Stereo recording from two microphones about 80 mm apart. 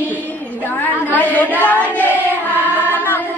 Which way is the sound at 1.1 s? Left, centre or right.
Centre.